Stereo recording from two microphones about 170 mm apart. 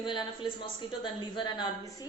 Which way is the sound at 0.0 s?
30° left (ahead or behind).